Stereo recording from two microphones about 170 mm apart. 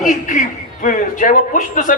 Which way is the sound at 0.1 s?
50° left (ahead or behind).